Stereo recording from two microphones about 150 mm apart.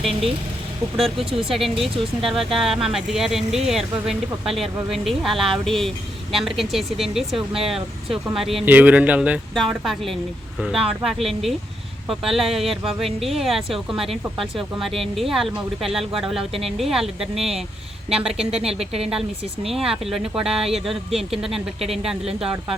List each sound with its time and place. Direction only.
0.9 s speech: centre (ahead or behind)
9.6 s speech: centre (ahead or behind)
18.5 s a woman's voice: 40° right (ahead or behind)
19.7 s speech: centre (ahead or behind)
22.3 s a woman's voice: 40° right (ahead or behind)